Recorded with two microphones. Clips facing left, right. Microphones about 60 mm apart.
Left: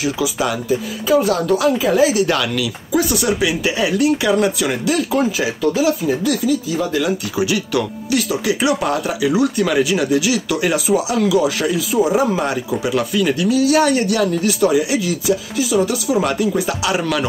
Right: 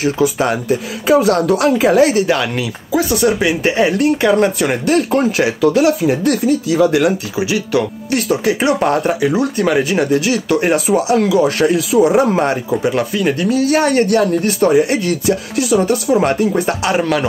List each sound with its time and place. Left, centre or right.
0.0 s speech: right
0.7 s speech: right
2.2 s speech: right
5.6 s speech: right
6.3 s speech: right
6.7 s speech: right
7.3 s speech: right
8.1 s speech: right
11.4 s speech: right
12.4 s speech: right
15.8 s speech: right